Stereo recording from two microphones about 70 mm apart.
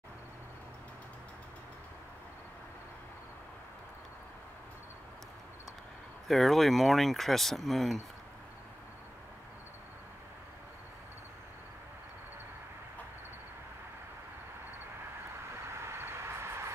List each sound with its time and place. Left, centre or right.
6.2 s speech: centre
15.7 s vehicle: right